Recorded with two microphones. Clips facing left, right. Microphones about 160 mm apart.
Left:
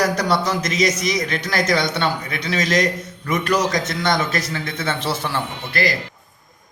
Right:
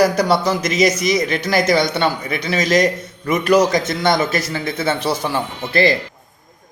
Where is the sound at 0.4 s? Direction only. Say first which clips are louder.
Right 4 dB; 5° right (ahead or behind).